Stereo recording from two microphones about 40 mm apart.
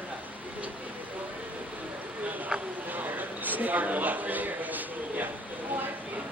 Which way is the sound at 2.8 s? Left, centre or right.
Right.